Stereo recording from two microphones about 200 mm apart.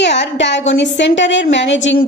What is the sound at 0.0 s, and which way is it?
A woman's voice, 60° left (ahead or behind).